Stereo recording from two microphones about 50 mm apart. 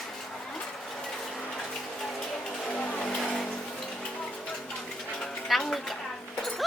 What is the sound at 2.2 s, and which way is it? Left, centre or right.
Music, centre.